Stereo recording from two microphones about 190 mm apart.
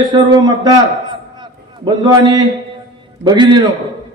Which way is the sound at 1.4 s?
25° right (ahead or behind).